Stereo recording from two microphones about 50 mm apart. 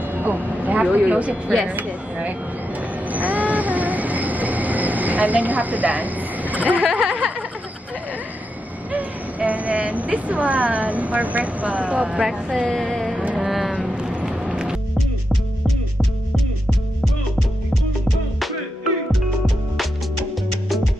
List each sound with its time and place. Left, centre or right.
0.0 s vehicle: right
0.9 s speech: right
1.7 s a sound: right
7.0 s speech: right
8.9 s speech: right
12.7 s music: centre
13.4 s a sound: centre
14.1 s vehicle: centre
14.5 s music: centre